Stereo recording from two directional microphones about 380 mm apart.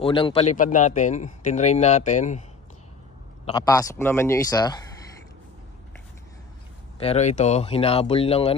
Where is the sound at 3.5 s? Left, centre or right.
Centre.